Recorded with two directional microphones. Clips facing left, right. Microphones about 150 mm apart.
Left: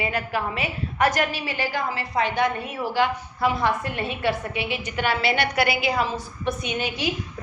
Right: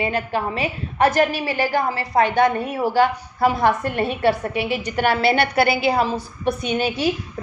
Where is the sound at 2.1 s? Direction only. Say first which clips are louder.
Right 6 dB; 50° right (ahead or behind).